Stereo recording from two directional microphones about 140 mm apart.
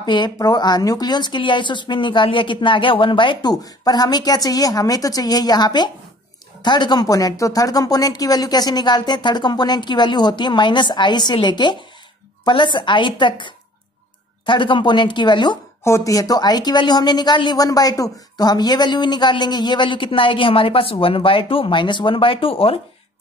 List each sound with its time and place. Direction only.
0.0 s speech: 30° left (ahead or behind)
15.8 s speech: 20° left (ahead or behind); by 22.8 s 40° left (ahead or behind)